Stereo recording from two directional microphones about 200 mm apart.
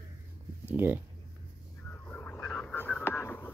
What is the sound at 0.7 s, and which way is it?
Speech, 10° right (ahead or behind).